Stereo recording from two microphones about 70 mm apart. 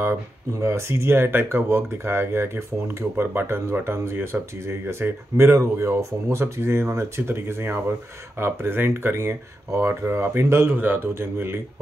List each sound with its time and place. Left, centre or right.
0.0 s speech: right